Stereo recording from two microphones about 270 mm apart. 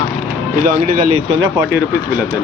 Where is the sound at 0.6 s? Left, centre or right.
Right.